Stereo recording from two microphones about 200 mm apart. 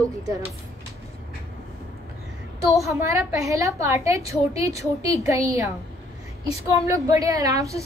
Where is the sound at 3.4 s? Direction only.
15° right (ahead or behind).